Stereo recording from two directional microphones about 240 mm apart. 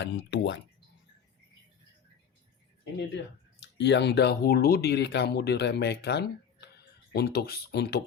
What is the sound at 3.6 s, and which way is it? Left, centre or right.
Speech, left.